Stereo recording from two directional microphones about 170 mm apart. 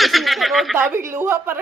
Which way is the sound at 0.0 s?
Centre (ahead or behind).